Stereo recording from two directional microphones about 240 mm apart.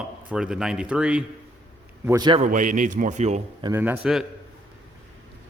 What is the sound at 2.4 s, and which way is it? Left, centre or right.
A man's voice, right.